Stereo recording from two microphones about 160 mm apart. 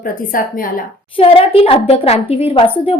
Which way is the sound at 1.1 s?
35° left (ahead or behind).